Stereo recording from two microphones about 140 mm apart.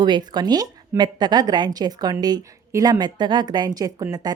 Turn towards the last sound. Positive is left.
turn(degrees=-25)  # may be behind; listen again after turning